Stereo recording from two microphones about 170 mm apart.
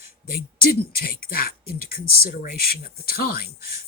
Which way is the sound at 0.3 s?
60° left (ahead or behind).